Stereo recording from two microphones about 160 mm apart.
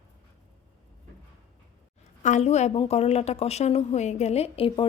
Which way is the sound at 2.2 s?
45° left (ahead or behind).